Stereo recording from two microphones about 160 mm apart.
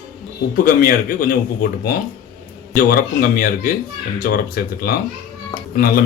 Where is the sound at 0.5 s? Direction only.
65° left (ahead or behind).